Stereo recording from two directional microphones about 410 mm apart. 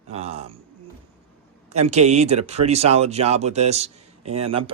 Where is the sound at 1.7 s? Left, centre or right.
Centre.